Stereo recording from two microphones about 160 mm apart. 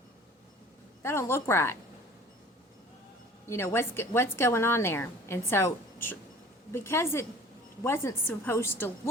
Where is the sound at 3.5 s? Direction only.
15° left (ahead or behind).